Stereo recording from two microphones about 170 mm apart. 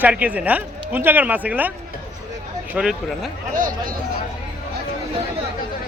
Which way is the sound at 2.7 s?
5° right (ahead or behind).